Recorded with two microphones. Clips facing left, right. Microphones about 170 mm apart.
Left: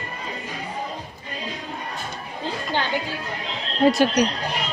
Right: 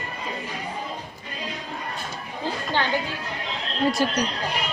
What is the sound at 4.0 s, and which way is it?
Speech, 85° left.